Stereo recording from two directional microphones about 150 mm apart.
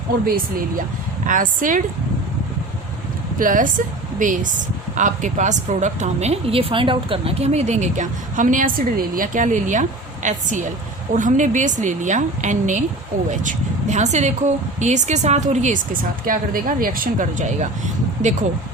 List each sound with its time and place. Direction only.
0.3 s speech: 80° right
1.3 s speech: 65° right (ahead or behind)
3.3 s a woman's voice: 65° right (ahead or behind)